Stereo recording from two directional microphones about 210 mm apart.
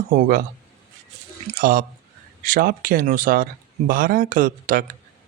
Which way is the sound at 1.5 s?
40° right (ahead or behind).